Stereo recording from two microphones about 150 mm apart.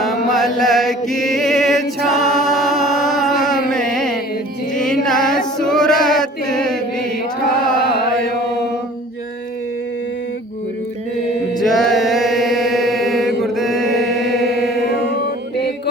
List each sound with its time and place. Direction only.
0.0 s music: centre (ahead or behind)
11.6 s chant: centre (ahead or behind)
14.3 s chant: 90° left